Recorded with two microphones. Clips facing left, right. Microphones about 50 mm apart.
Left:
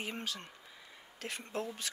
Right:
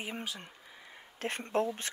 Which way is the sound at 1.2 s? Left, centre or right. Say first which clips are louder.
Right 8 dB; right.